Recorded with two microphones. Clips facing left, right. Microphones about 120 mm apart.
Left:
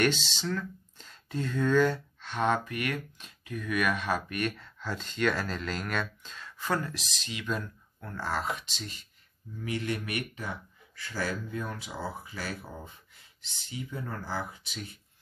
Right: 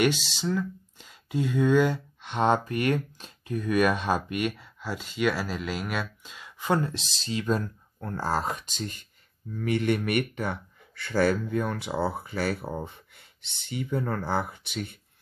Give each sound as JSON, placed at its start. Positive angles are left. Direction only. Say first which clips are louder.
{"t": 0.0, "sound": "speech", "louder": "right 3 dB", "side_deg": -10}
{"t": 2.4, "sound": "speech", "louder": "right 5 dB", "side_deg": -30}
{"t": 4.4, "sound": "speech", "louder": "right 3 dB", "side_deg": -10}
{"t": 9.6, "sound": "speech", "louder": "right 7 dB", "side_deg": -60}